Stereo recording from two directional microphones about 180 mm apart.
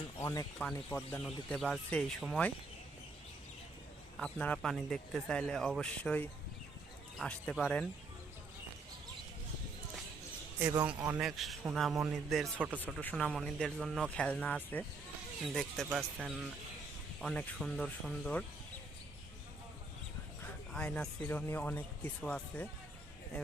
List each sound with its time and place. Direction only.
0.2 s speech: 20° left (ahead or behind); by 2.5 s centre (ahead or behind)
4.2 s speech: 5° left (ahead or behind)
10.6 s a man's voice: 20° right (ahead or behind)
12.8 s speech: 10° left (ahead or behind)
17.2 s speech: centre (ahead or behind)
20.7 s speech: 5° left (ahead or behind)